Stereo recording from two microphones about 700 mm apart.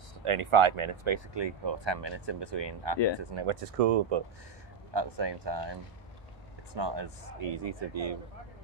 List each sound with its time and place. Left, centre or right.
0.2 s speech: right
3.7 s speech: right
4.9 s speech: right